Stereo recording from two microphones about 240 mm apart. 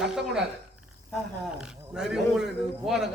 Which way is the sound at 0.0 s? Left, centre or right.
Centre.